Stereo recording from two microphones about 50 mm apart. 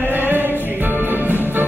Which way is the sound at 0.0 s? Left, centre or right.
Right.